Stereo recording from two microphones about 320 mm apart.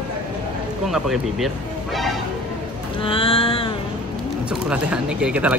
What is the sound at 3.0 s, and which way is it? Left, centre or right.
Music, centre.